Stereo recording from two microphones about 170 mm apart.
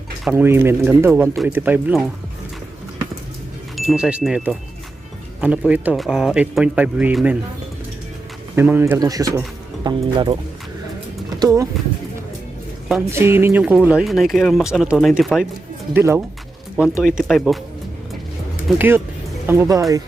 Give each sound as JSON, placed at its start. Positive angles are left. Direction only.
{"t": 0.3, "sound": "speech", "side_deg": -10}
{"t": 3.8, "sound": "speech", "side_deg": -5}
{"t": 8.5, "sound": "speech", "side_deg": -15}
{"t": 11.3, "sound": "speech", "side_deg": -20}
{"t": 13.1, "sound": "speech", "side_deg": -15}
{"t": 15.9, "sound": "speech", "side_deg": -15}
{"t": 18.8, "sound": "speech", "side_deg": -15}